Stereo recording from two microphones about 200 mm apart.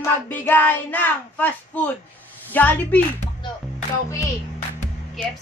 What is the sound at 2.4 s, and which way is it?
Speech, 10° left (ahead or behind).